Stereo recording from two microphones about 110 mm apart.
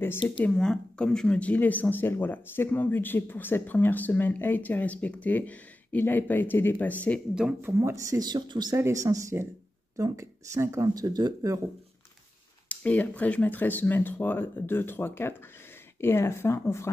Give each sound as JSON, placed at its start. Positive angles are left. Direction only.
{"t": 0.4, "sound": "speech", "side_deg": 5}
{"t": 7.6, "sound": "speech", "side_deg": -25}
{"t": 8.3, "sound": "speech", "side_deg": -40}
{"t": 8.7, "sound": "speech", "side_deg": -25}
{"t": 12.6, "sound": "speech", "side_deg": 15}